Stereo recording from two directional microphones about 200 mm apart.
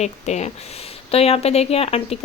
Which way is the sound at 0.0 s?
35° left (ahead or behind).